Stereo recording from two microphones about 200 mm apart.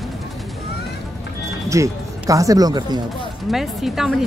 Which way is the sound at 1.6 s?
15° right (ahead or behind).